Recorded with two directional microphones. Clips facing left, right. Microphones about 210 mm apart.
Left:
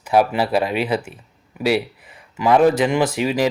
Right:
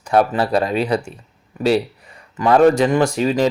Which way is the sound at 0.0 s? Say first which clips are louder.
Right 1 dB; 5° left (ahead or behind).